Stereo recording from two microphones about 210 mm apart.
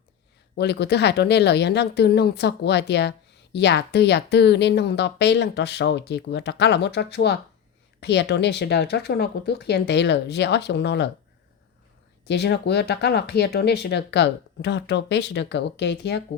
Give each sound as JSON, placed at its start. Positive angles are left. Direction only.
{"t": 0.5, "sound": "speech", "side_deg": 50}
{"t": 12.3, "sound": "speech", "side_deg": 55}